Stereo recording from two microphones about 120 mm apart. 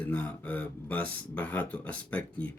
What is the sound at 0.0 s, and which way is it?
Speech, 15° left (ahead or behind).